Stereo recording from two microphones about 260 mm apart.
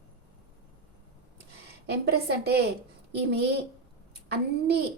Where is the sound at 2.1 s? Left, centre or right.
Right.